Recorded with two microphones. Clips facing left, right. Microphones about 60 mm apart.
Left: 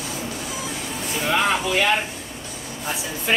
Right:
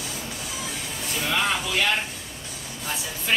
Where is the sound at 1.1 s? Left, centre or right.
Centre.